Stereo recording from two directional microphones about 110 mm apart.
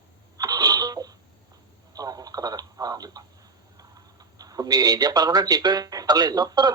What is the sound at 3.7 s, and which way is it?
Speech, 35° right (ahead or behind).